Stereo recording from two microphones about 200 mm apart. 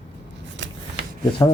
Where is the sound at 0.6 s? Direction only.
65° right (ahead or behind).